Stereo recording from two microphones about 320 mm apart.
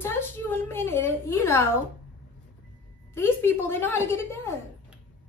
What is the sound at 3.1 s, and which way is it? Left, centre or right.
A woman's voice, centre.